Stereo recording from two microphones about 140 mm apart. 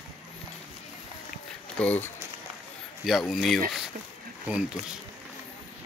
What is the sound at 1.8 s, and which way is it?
Speech, 10° left (ahead or behind).